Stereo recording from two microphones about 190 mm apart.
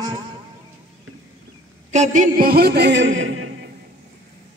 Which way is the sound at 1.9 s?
40° right (ahead or behind).